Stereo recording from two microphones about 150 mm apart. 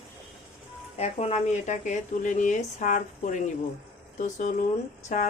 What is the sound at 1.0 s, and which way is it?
Speech, 45° left (ahead or behind).